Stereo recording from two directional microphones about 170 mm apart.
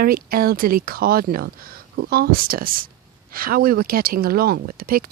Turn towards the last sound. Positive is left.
turn(degrees=-60)  # may be behind; listen again after turning